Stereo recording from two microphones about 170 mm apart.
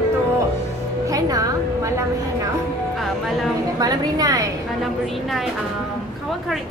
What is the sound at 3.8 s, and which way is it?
Speech, 20° right (ahead or behind).